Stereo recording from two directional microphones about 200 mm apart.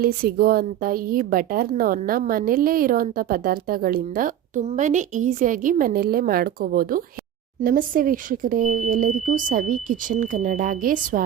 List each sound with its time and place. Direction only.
0.0 s a woman's voice: 50° right (ahead or behind)